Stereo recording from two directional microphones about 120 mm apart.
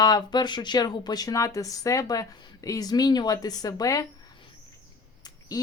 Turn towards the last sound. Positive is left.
turn(degrees=30)  # may be behind; listen again after turning